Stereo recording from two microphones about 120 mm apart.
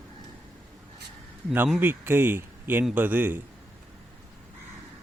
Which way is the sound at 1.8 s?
15° right (ahead or behind).